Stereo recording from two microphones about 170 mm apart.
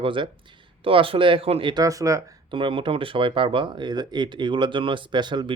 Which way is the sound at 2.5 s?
30° right (ahead or behind).